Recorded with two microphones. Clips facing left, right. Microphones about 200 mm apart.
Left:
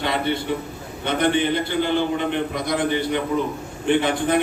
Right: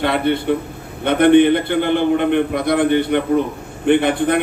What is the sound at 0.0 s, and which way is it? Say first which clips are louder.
A man's voice: right 6 dB; 60° right (ahead or behind).